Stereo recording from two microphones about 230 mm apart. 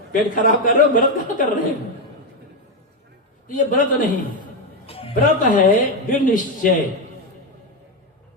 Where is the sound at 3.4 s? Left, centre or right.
Left.